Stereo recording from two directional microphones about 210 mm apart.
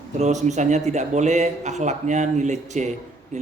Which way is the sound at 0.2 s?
35° right (ahead or behind).